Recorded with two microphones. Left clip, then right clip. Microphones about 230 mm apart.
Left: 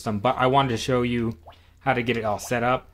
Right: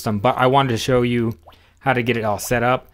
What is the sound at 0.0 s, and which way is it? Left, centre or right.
Speech, right.